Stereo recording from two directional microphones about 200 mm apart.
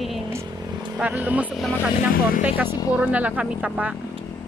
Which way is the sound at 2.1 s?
45° left (ahead or behind).